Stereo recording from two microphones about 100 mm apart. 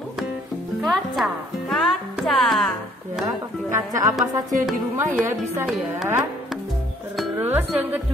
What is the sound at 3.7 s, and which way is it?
Speech, 35° right (ahead or behind).